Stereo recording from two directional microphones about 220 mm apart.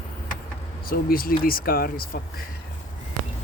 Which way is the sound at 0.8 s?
40° left (ahead or behind).